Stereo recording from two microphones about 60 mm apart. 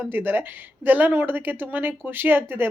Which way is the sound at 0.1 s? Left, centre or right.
Right.